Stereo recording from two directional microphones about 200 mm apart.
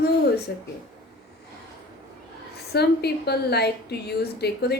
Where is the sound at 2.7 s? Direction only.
55° left (ahead or behind).